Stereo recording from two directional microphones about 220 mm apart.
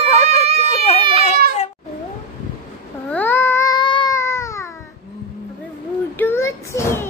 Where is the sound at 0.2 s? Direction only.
30° right (ahead or behind).